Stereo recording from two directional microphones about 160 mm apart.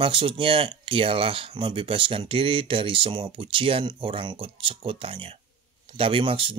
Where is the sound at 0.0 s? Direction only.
35° right (ahead or behind).